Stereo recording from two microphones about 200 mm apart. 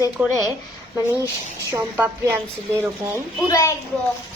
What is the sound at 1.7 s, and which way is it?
Speech, 10° right (ahead or behind).